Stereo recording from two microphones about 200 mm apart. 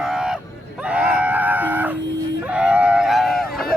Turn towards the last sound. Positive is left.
turn(degrees=0)  # may be behind; listen again after turning